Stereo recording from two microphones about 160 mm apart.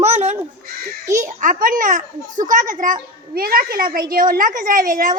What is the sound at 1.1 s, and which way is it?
A child's voice, 55° right (ahead or behind).